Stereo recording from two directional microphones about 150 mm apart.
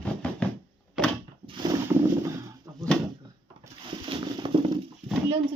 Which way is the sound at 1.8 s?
20° right (ahead or behind).